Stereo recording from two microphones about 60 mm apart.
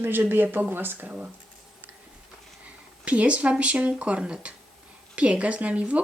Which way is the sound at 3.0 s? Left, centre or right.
Right.